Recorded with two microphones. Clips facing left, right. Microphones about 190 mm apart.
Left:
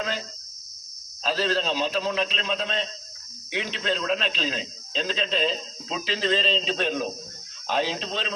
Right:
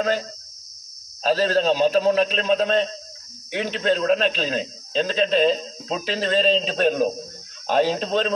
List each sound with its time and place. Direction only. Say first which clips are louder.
1.2 s a man's voice: right 6 dB; 45° right (ahead or behind)